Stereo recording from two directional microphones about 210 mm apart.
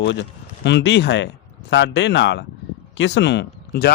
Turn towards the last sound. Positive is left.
turn(degrees=50)  # may be behind; listen again after turning